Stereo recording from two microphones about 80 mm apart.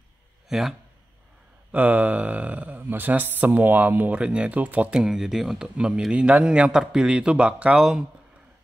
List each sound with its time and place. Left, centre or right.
0.5 s a man's voice: centre
1.7 s speech: right
5.0 s speech: centre